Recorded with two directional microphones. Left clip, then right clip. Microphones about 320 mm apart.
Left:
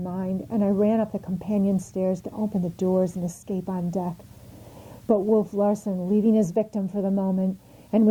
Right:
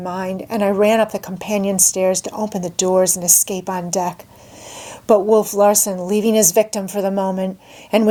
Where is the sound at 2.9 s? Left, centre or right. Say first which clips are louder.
Right 12 dB; centre.